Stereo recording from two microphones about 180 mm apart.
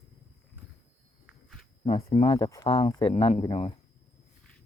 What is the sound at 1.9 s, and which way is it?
Speech, 30° left (ahead or behind).